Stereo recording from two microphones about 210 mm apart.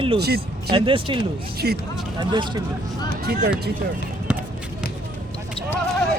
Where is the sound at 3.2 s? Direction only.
50° right (ahead or behind).